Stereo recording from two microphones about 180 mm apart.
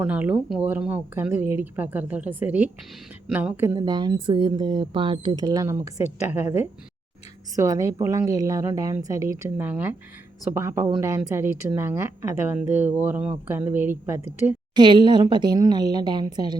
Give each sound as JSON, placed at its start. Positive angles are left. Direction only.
{"t": 0.0, "sound": "a woman's voice", "side_deg": -10}
{"t": 7.5, "sound": "speech", "side_deg": -20}
{"t": 14.8, "sound": "a woman's voice", "side_deg": -25}